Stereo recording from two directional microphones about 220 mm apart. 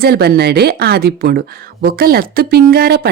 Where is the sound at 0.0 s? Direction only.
45° right (ahead or behind).